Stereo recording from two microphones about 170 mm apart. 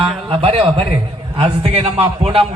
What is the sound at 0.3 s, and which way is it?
A man's voice, 35° right (ahead or behind).